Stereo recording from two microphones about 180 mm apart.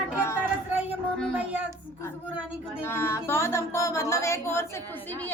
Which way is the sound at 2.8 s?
15° left (ahead or behind).